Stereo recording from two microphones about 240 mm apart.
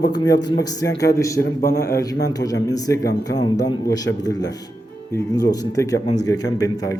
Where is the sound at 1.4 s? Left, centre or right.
Left.